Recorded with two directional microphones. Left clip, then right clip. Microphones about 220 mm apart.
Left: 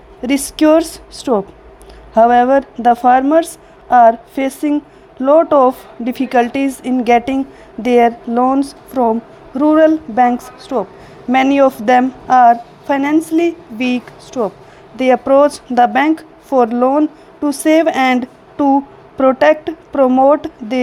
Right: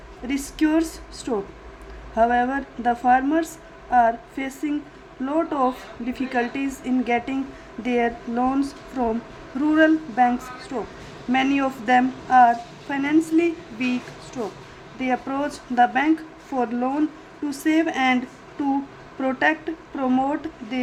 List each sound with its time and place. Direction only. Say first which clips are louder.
0.2 s a woman's voice: left 10 dB; 35° left (ahead or behind)
19.2 s a woman's voice: left 11 dB; 40° left (ahead or behind)